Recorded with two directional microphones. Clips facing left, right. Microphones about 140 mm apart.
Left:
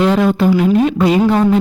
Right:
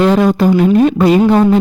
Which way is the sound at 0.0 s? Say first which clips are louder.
Right 2 dB; 40° right (ahead or behind).